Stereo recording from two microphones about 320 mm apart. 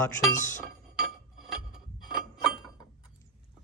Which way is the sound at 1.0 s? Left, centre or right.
Centre.